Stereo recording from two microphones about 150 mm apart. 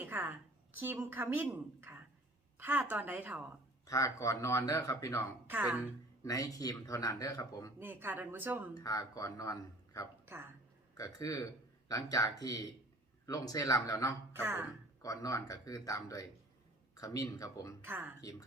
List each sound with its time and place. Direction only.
0.0 s a woman's voice: 10° right (ahead or behind)
3.8 s speech: 20° left (ahead or behind)
5.5 s a woman's voice: 10° right (ahead or behind)
6.2 s speech: 25° left (ahead or behind)
7.8 s a woman's voice: 15° right (ahead or behind)
8.7 s speech: 25° left (ahead or behind)
14.3 s a woman's voice: 15° right (ahead or behind)
15.0 s speech: 25° left (ahead or behind)
17.8 s a woman's voice: 10° right (ahead or behind)
18.2 s speech: 25° left (ahead or behind)